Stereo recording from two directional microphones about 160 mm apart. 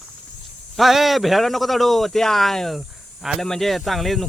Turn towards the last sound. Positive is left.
turn(degrees=0)  # may be behind; listen again after turning